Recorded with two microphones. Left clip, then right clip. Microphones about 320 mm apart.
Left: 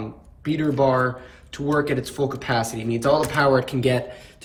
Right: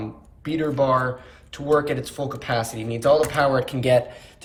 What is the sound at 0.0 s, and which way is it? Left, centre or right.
Speech, centre.